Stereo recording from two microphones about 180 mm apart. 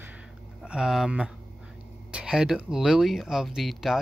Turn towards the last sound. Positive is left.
turn(degrees=0)  # may be behind; listen again after turning